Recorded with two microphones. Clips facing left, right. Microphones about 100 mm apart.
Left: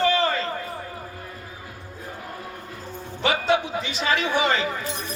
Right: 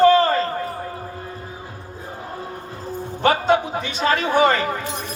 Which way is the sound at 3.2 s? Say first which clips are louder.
Right 4 dB; 40° right (ahead or behind).